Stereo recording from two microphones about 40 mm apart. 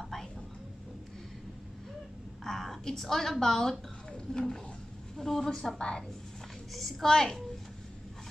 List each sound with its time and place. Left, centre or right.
0.0 s a sound: centre
2.4 s a woman's voice: centre
4.1 s a sound: centre
5.1 s a woman's voice: centre
5.8 s a woman's voice: centre
6.7 s a woman's voice: centre